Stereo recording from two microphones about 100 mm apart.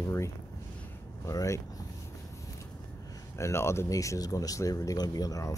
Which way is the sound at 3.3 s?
30° left (ahead or behind).